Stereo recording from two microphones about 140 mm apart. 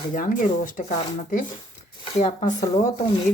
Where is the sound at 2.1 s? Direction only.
55° left (ahead or behind).